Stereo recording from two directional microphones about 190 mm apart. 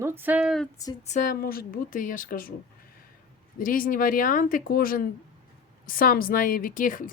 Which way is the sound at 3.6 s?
45° left (ahead or behind).